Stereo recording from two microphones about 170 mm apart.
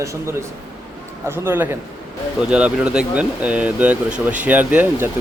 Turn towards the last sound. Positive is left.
turn(degrees=-10)  # may be behind; listen again after turning